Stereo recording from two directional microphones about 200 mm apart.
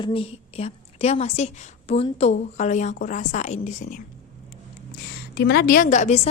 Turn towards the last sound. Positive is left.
turn(degrees=35)  # may be behind; listen again after turning